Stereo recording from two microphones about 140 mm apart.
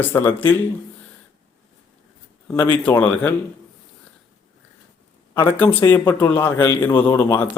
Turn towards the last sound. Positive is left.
turn(degrees=15)  # may be behind; listen again after turning